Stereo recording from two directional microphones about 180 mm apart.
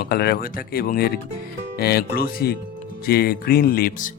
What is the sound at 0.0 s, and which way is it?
Speech, 60° left (ahead or behind).